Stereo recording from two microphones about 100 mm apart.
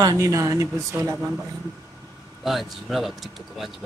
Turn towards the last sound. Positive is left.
turn(degrees=0)  # may be behind; listen again after turning